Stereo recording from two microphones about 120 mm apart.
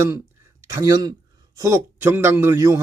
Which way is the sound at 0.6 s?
25° right (ahead or behind).